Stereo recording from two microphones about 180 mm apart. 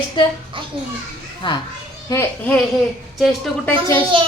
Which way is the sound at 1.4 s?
25° left (ahead or behind).